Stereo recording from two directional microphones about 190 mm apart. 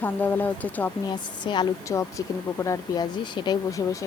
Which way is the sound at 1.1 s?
25° left (ahead or behind).